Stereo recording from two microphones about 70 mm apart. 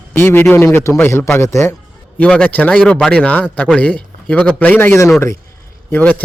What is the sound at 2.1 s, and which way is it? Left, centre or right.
Speech, centre.